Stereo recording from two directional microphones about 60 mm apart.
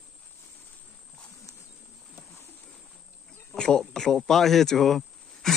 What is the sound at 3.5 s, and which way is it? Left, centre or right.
Speech, centre.